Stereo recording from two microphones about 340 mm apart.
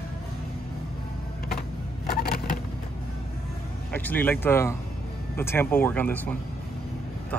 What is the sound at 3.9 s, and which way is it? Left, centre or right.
Speech, centre.